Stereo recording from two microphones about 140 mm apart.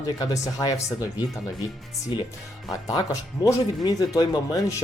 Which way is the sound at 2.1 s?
35° left (ahead or behind).